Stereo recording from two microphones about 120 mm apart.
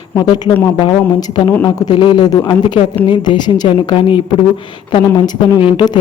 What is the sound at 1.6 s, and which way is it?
A woman's voice, 35° left (ahead or behind).